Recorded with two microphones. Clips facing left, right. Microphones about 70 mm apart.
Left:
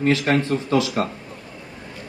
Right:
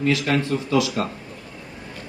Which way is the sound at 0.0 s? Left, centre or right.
Left.